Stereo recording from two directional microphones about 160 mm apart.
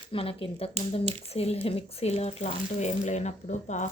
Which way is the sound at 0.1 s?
35° left (ahead or behind).